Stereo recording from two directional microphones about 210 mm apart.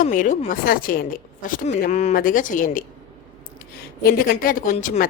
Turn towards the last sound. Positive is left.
turn(degrees=40)  # may be behind; listen again after turning